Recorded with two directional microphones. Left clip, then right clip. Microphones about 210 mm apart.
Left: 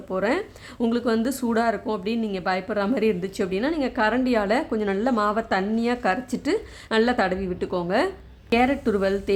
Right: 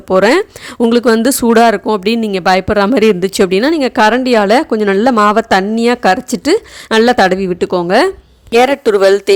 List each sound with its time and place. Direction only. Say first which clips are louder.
0.1 s speech: right 15 dB; 40° right (ahead or behind)